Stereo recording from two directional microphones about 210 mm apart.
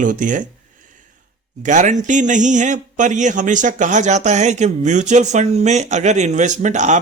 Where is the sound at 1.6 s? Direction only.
35° right (ahead or behind).